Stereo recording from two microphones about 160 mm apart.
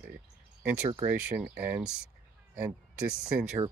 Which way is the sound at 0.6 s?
15° right (ahead or behind).